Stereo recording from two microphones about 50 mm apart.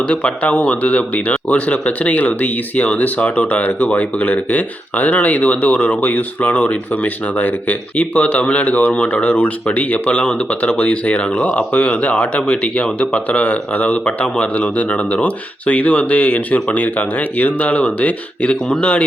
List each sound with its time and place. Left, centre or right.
0.1 s speech: left
7.9 s speech: left
9.3 s speech: left